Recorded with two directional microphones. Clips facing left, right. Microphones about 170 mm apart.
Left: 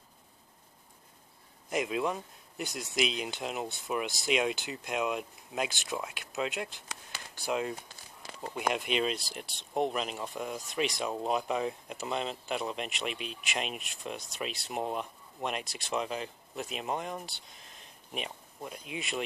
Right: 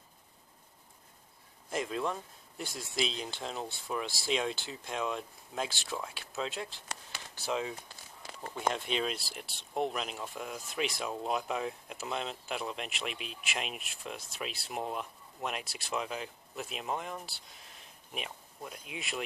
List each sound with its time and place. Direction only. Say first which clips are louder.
1.7 s speech: left 3 dB; 5° left (ahead or behind)
4.0 s speech: left 3 dB; 20° left (ahead or behind)
4.3 s speech: left 3 dB; 10° left (ahead or behind)